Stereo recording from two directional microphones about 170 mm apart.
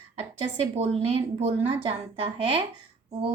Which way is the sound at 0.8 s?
40° right (ahead or behind).